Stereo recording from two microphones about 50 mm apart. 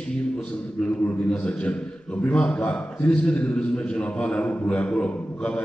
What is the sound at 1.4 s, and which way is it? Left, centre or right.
A man's voice, left.